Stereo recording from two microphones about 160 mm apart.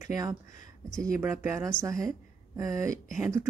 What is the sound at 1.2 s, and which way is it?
Speech, 10° right (ahead or behind).